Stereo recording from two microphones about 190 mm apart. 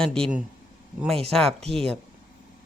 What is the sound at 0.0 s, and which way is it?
Speech, 5° left (ahead or behind).